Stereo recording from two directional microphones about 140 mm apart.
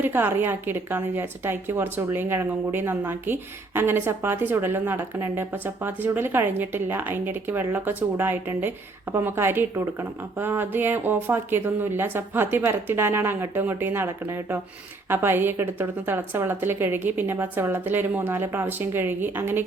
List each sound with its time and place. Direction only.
0.0 s a woman's voice: 15° right (ahead or behind)